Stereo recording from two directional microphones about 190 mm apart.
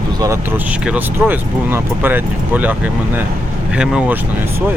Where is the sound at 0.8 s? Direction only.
10° right (ahead or behind).